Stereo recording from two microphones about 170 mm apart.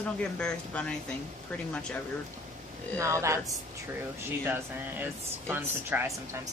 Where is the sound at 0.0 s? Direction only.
5° left (ahead or behind).